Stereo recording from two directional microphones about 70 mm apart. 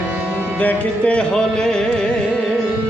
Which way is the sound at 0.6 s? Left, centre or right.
Left.